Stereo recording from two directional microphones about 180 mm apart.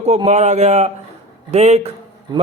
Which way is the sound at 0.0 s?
35° right (ahead or behind).